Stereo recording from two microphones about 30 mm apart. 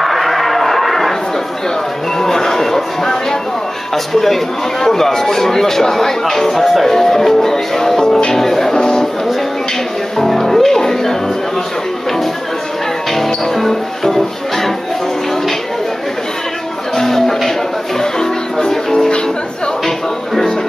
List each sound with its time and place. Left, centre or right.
0.0 s a sound: centre
2.1 s music: centre
3.9 s speech: centre
6.6 s speech: centre
6.9 s speech: centre
8.7 s a sound: left
10.1 s speech: centre
13.1 s music: centre
16.9 s music: centre